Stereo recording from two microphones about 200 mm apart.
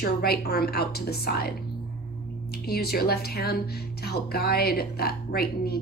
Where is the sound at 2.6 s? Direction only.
50° left (ahead or behind).